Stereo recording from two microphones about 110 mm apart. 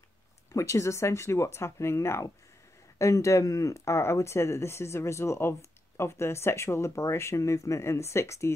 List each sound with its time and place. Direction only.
0.5 s speech: 30° left (ahead or behind)